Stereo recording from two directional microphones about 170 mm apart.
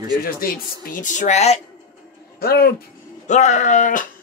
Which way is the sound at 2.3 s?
65° left (ahead or behind).